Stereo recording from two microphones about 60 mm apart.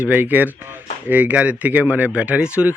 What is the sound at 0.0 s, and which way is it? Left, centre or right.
Speech, right.